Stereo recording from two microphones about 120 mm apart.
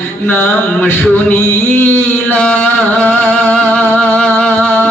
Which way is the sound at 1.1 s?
15° left (ahead or behind).